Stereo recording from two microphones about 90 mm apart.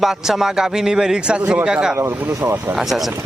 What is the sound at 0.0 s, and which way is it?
A man's voice, 5° right (ahead or behind).